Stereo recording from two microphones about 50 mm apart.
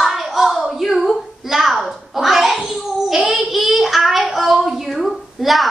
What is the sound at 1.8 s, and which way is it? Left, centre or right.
Babbling, centre.